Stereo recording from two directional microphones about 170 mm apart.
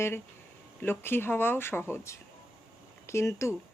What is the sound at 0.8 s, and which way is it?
Speech, 10° left (ahead or behind).